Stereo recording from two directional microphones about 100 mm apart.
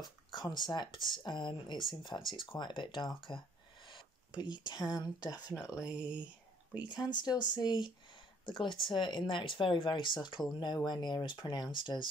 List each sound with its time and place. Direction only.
0.0 s speech: 45° left (ahead or behind)
5.8 s speech: 10° right (ahead or behind)
6.8 s speech: 45° left (ahead or behind)